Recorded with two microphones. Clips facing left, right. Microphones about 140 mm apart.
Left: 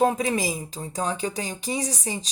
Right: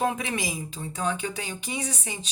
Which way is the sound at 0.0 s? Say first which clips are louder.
Left 5 dB; 35° left (ahead or behind).